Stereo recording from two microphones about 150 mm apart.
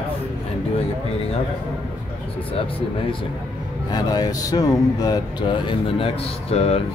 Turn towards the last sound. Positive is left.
turn(degrees=40)  # may be behind; listen again after turning